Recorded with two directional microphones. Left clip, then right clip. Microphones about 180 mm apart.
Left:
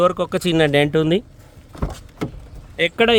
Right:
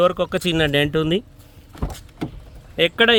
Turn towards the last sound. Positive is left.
turn(degrees=0)  # may be behind; listen again after turning